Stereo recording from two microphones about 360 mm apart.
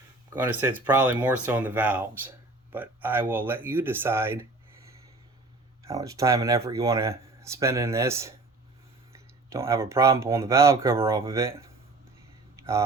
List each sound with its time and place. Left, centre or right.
0.3 s speech: centre
5.8 s speech: centre
12.5 s a sound: centre